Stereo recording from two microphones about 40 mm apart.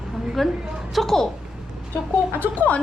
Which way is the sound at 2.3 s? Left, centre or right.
Left.